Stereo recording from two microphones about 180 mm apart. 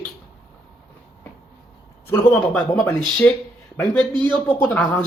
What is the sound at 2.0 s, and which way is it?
Speech, 15° left (ahead or behind).